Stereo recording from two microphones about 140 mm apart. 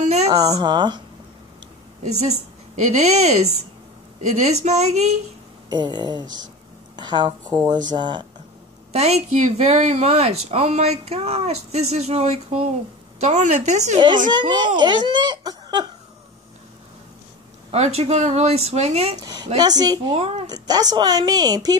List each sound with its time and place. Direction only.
0.0 s a sound: 50° right (ahead or behind)
0.6 s speech: 30° right (ahead or behind)
2.0 s speech: 50° right (ahead or behind)
5.7 s speech: 30° right (ahead or behind)
8.9 s speech: 50° right (ahead or behind)
13.9 s speech: 35° right (ahead or behind)
17.6 s speech: 50° right (ahead or behind)
19.2 s speech: 30° right (ahead or behind)
20.2 s speech: 50° right (ahead or behind)
20.4 s speech: 30° right (ahead or behind)